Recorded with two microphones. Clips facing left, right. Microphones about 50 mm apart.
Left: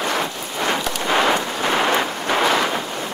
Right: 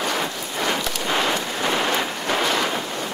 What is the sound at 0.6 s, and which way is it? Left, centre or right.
Rain, left.